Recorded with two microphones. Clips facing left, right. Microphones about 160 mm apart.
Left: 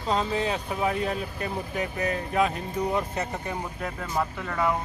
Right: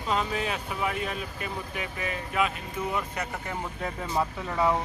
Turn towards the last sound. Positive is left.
turn(degrees=-5)  # may be behind; listen again after turning